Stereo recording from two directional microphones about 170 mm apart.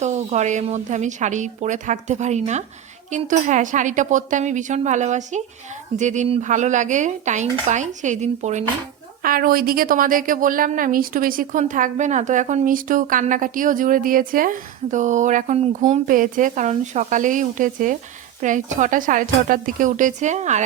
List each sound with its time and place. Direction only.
0.0 s a woman's voice: 45° right (ahead or behind)
9.2 s a woman's voice: 55° right (ahead or behind)